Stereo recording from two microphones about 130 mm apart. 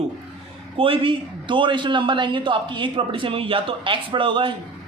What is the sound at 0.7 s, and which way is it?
A man's voice, 45° right (ahead or behind).